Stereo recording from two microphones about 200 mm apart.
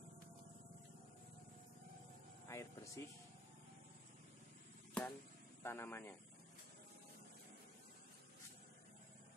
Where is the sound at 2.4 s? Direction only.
15° left (ahead or behind).